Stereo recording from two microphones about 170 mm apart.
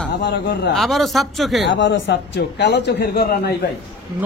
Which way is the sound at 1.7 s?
90° left.